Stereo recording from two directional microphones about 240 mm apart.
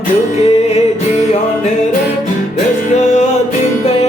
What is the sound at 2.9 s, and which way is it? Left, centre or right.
Music, left.